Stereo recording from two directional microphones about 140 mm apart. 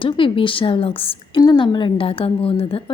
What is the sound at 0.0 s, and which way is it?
A woman's voice, 35° left (ahead or behind).